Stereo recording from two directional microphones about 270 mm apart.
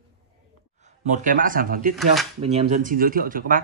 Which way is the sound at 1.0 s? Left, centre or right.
Right.